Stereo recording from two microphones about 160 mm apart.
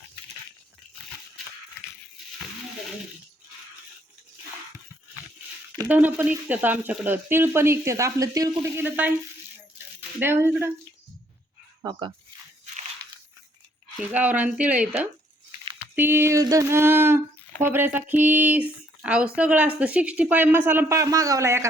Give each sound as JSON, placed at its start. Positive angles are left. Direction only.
{"t": 5.9, "sound": "speech", "side_deg": -10}
{"t": 11.8, "sound": "speech", "side_deg": -25}
{"t": 14.1, "sound": "speech", "side_deg": -10}